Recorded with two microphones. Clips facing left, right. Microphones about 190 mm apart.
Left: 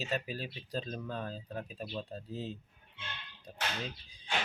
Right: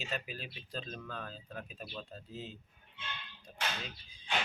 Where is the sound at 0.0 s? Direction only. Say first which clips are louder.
Left 5 dB; 35° left (ahead or behind).